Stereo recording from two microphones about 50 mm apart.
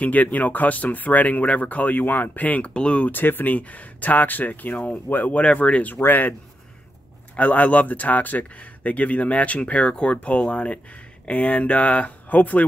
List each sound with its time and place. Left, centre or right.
0.0 s speech: left
2.7 s speech: left
3.1 s speech: left
5.3 s speech: left
7.3 s speech: left